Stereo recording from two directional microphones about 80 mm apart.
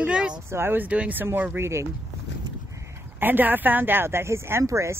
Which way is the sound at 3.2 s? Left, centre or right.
Right.